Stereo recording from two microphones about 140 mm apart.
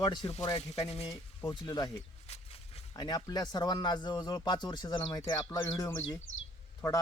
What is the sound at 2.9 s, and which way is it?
Speech, 30° left (ahead or behind).